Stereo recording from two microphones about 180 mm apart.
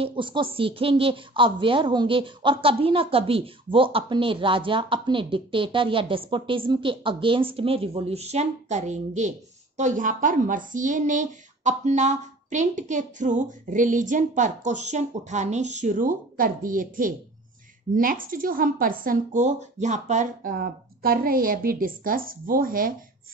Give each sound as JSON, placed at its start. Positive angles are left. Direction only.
{"t": 0.0, "sound": "a woman's voice", "side_deg": -30}